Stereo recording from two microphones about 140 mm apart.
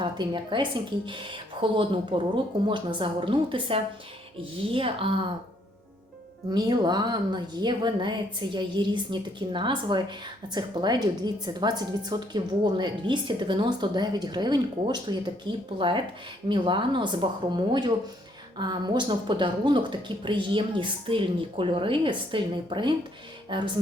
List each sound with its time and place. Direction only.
0.0 s a woman's voice: 35° right (ahead or behind)
6.5 s a woman's voice: 30° right (ahead or behind)